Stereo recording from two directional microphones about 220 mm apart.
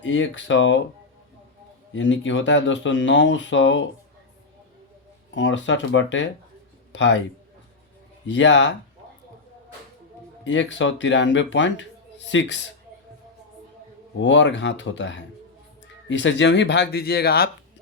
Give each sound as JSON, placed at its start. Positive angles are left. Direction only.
{"t": 0.0, "sound": "speech", "side_deg": 60}
{"t": 2.0, "sound": "speech", "side_deg": 55}
{"t": 5.3, "sound": "speech", "side_deg": 55}
{"t": 8.3, "sound": "speech", "side_deg": 55}
{"t": 10.4, "sound": "speech", "side_deg": 55}
{"t": 14.2, "sound": "speech", "side_deg": 55}